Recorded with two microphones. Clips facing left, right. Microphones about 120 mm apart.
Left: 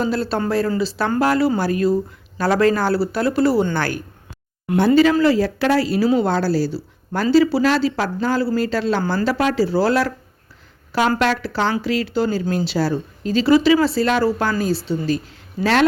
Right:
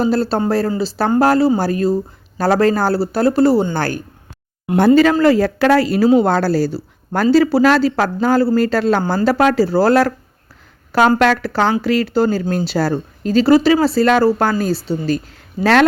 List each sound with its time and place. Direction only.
0.0 s speech: 35° right (ahead or behind)
5.2 s speech: 50° right (ahead or behind)
11.2 s speech: 50° right (ahead or behind)